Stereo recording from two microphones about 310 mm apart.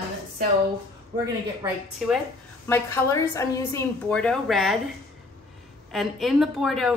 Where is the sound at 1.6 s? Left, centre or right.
Centre.